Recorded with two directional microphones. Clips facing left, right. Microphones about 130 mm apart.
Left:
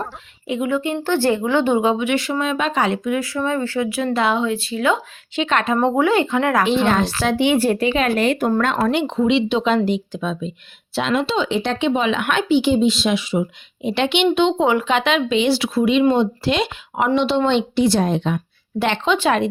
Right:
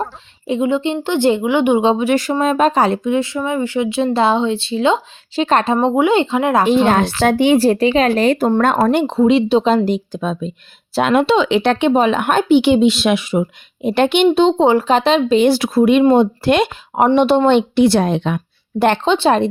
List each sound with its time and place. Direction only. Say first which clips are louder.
0.4 s speech: right 4 dB; 30° right (ahead or behind)
1.8 s speech: right 4 dB; 30° right (ahead or behind)
5.4 s speech: right 4 dB; 35° right (ahead or behind)
5.8 s speech: right 3 dB; 15° right (ahead or behind)
6.7 s speech: right 4 dB; 45° right (ahead or behind)
10.9 s speech: right 7 dB; 55° right (ahead or behind)
11.3 s speech: right 6 dB; 75° right (ahead or behind); by 12.5 s 40° right (ahead or behind)
12.5 s speech: right 4 dB; 65° right (ahead or behind)
16.9 s speech: right 6 dB; 40° right (ahead or behind); by 18.4 s 65° right (ahead or behind)
19.0 s speech: right 4 dB; 30° right (ahead or behind)